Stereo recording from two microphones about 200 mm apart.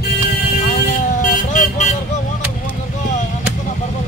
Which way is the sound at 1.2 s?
40° left (ahead or behind).